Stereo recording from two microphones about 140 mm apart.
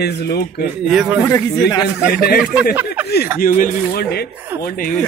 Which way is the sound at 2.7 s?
10° right (ahead or behind).